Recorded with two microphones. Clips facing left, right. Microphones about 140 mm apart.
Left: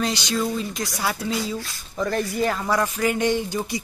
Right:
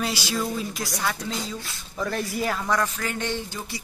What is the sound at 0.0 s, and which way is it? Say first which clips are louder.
Speech: left 3 dB; 5° right (ahead or behind).